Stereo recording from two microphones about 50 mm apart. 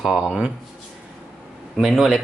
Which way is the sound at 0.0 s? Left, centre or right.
Centre.